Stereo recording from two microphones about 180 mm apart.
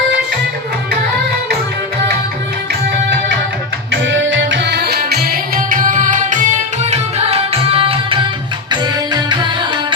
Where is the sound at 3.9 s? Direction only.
90° right; by 6.4 s 45° right (ahead or behind).